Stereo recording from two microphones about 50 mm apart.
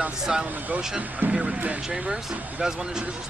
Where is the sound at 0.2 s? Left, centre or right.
Centre.